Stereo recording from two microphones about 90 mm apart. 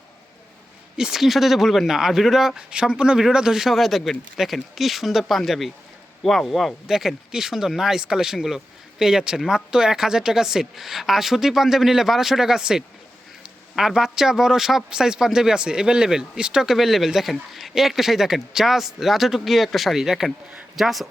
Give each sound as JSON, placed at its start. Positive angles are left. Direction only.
{"t": 0.9, "sound": "a man's voice", "side_deg": -5}